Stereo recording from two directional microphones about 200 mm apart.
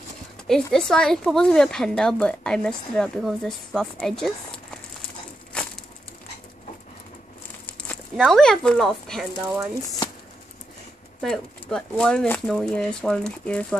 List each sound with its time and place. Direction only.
0.5 s a woman's voice: 5° left (ahead or behind)
5.5 s crushing: 5° left (ahead or behind)
7.9 s speech: 5° left (ahead or behind)
11.1 s a woman's voice: 5° left (ahead or behind)